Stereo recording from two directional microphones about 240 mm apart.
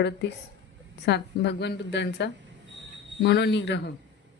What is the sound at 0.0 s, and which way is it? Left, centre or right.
Speech, left.